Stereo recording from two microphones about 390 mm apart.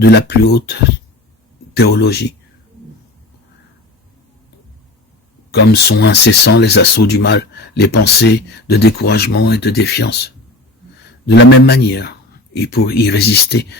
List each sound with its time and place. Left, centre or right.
0.0 s speech: left
5.5 s speech: left
11.3 s speech: left